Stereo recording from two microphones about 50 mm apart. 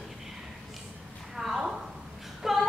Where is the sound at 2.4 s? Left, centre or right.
Centre.